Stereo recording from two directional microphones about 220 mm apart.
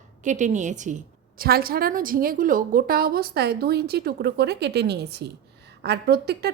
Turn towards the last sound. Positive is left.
turn(degrees=-45)  # may be behind; listen again after turning